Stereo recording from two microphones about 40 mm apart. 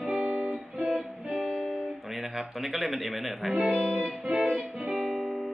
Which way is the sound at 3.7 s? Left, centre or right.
Centre.